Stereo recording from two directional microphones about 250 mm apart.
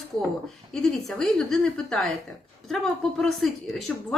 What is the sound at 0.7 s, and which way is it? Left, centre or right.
A woman's voice, centre.